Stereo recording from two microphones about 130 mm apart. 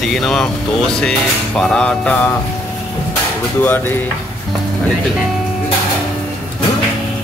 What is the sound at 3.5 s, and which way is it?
Speech, 15° left (ahead or behind).